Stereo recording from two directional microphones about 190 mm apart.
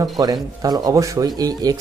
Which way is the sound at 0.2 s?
20° right (ahead or behind).